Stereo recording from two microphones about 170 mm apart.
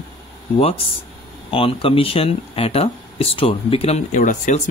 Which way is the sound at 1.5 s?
35° left (ahead or behind).